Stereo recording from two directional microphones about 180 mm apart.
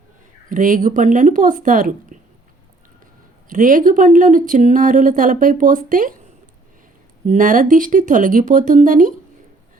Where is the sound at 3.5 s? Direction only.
50° right (ahead or behind).